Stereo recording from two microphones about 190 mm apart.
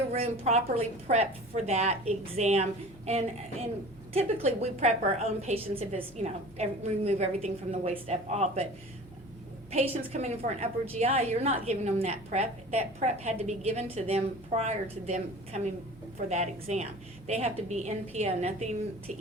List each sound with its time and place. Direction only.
0.1 s a woman's voice: 35° right (ahead or behind)
4.1 s a woman's voice: 30° right (ahead or behind)
9.7 s a woman's voice: 35° right (ahead or behind)